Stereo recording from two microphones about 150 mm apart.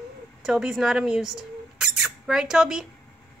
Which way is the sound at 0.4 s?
5° right (ahead or behind).